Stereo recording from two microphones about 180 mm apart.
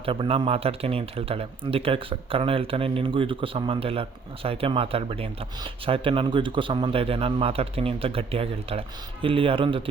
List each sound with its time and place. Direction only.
0.0 s speech: 30° right (ahead or behind)